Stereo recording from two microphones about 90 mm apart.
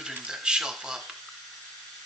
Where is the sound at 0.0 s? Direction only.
10° right (ahead or behind).